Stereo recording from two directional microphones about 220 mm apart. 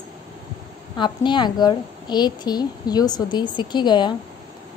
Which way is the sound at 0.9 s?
20° left (ahead or behind).